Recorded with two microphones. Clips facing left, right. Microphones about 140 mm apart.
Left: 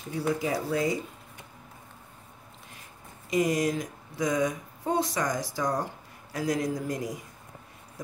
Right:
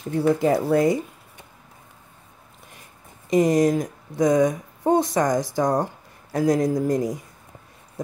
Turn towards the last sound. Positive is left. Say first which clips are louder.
# right 9 dB
turn(degrees=-45)  # may be behind; listen again after turning